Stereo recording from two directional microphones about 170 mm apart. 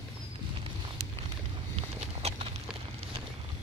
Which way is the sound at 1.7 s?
35° right (ahead or behind).